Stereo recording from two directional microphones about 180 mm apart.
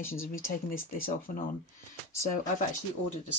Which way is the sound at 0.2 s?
50° left (ahead or behind).